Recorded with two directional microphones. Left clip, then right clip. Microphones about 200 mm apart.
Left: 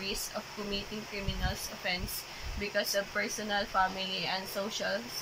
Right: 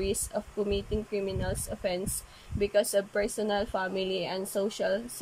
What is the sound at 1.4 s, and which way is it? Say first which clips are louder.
Speech: right 3 dB; 50° right (ahead or behind).